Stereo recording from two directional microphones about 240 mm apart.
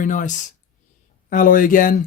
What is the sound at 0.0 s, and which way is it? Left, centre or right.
Speech, left.